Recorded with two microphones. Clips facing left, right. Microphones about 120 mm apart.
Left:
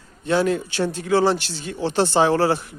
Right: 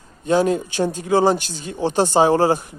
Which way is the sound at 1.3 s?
45° right (ahead or behind).